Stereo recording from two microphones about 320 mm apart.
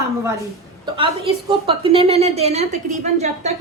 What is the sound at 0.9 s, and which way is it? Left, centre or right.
A woman's voice, centre.